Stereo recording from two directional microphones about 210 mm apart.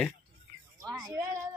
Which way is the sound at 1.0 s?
15° right (ahead or behind).